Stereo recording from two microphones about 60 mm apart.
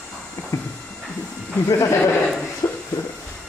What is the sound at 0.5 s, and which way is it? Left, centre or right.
Speech, left.